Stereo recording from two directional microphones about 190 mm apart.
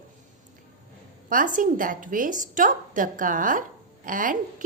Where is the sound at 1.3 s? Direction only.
45° right (ahead or behind).